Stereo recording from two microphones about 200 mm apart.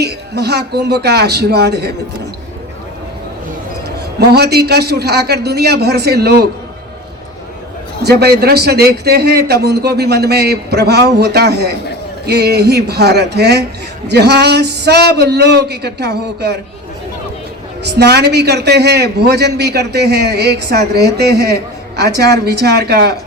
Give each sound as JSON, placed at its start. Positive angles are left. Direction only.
{"t": 0.0, "sound": "a man's voice", "side_deg": -55}
{"t": 3.8, "sound": "a man's voice", "side_deg": -55}
{"t": 8.0, "sound": "a man's voice", "side_deg": -55}
{"t": 17.8, "sound": "a man's voice", "side_deg": -55}